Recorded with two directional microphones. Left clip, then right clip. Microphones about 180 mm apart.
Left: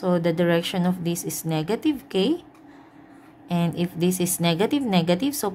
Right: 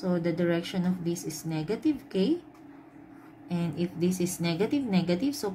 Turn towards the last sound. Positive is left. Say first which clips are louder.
# left 6 dB
turn(degrees=55)  # may be behind; listen again after turning